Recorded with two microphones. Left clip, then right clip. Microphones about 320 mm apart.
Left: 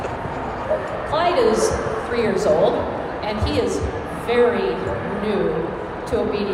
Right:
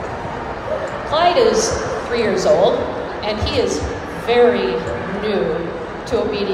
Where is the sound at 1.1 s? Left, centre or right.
Centre.